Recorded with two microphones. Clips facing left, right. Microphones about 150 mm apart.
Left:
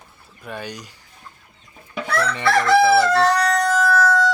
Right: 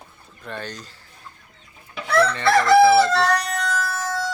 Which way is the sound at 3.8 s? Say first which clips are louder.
Left 9 dB; 75° left (ahead or behind).